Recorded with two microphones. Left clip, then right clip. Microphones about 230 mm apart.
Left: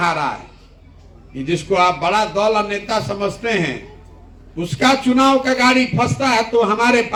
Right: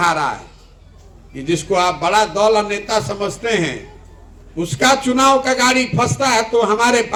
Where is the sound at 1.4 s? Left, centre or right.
Right.